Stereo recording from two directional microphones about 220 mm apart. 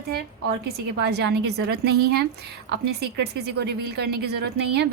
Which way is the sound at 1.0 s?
50° right (ahead or behind).